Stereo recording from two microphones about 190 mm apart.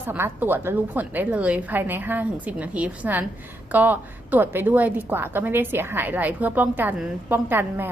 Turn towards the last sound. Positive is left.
turn(degrees=-10)  # may be behind; listen again after turning